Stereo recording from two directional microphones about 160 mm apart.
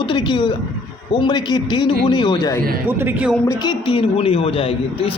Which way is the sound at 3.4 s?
20° left (ahead or behind).